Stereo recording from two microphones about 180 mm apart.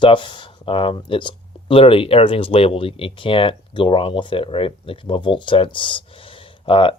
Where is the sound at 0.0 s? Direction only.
25° left (ahead or behind).